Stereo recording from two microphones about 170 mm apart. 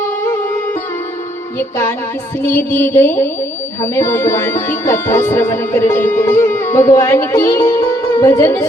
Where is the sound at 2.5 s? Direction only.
15° left (ahead or behind).